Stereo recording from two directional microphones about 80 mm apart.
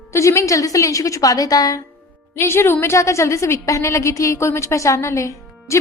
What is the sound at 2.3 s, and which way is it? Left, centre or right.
A woman's voice, left.